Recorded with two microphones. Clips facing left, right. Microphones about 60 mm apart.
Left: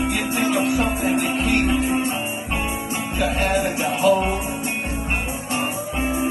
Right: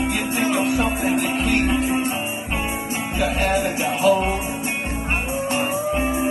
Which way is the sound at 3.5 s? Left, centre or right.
Left.